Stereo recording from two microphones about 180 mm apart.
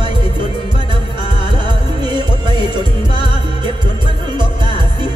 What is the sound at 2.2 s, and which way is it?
Music, 30° left (ahead or behind).